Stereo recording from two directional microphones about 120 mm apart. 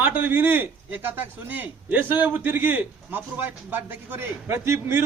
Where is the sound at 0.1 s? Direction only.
15° right (ahead or behind).